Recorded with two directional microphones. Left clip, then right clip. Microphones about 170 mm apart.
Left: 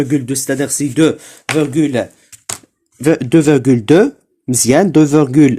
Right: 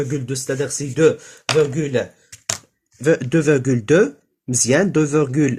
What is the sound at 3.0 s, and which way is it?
Speech, 30° left (ahead or behind).